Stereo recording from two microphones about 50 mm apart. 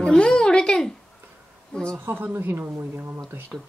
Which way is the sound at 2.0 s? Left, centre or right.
Right.